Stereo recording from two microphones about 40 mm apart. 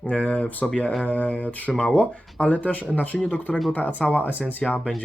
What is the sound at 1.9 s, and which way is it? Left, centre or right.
Speech, left.